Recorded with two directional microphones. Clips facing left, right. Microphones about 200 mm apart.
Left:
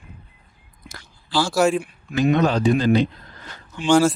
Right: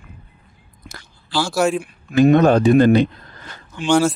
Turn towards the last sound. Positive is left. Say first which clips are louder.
# even
turn(degrees=5)  # may be behind; listen again after turning